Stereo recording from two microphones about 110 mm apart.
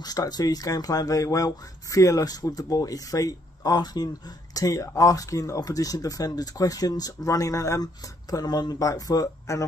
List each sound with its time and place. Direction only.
0.0 s speech: 35° left (ahead or behind)